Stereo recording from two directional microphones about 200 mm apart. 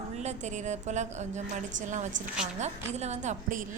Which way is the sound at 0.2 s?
35° right (ahead or behind).